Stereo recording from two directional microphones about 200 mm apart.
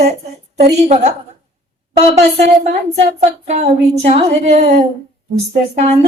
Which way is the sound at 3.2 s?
35° right (ahead or behind).